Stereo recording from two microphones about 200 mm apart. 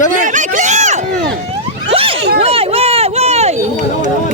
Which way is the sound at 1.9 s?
25° right (ahead or behind).